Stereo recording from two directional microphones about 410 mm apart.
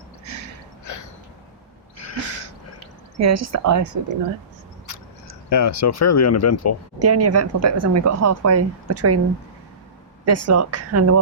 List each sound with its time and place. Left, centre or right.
2.0 s a sound: left
3.2 s speech: right
5.5 s speech: left
7.0 s speech: right
10.2 s speech: right